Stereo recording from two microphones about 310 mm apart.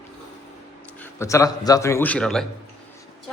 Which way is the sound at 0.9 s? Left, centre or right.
Centre.